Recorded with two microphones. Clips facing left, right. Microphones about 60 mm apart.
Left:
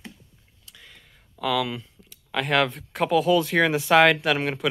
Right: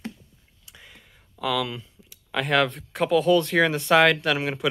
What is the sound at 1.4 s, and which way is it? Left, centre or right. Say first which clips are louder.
Speech: left 1 dB; centre.